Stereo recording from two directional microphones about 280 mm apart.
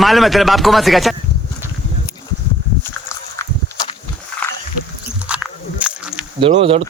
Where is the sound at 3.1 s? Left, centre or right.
Centre.